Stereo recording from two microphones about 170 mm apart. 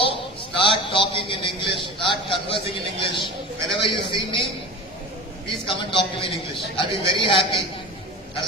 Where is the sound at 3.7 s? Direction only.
30° left (ahead or behind).